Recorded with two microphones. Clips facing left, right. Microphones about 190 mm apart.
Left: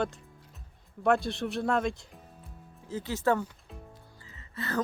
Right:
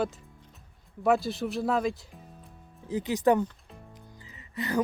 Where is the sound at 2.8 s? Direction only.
15° right (ahead or behind).